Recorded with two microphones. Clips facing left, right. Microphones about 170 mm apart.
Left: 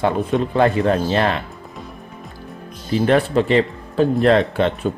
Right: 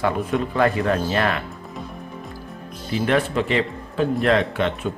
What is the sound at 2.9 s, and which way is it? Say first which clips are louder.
Speech: left 4 dB; 35° left (ahead or behind).